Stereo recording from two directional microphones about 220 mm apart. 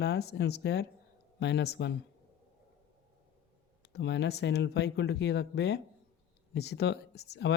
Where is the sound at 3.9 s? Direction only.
50° left (ahead or behind).